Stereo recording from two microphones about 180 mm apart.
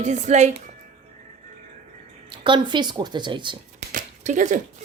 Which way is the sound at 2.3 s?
25° right (ahead or behind).